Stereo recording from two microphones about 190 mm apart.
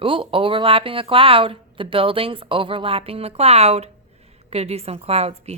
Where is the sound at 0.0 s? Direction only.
25° right (ahead or behind).